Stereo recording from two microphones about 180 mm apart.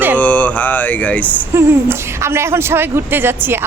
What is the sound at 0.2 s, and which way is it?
Speech, 10° left (ahead or behind).